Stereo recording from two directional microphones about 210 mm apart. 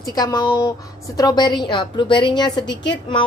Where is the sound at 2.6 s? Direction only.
55° left (ahead or behind).